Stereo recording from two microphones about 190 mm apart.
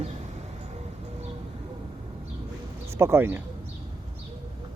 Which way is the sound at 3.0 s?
15° right (ahead or behind).